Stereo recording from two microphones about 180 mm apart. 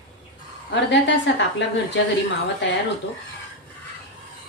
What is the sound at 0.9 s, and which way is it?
A woman's voice, 75° left (ahead or behind).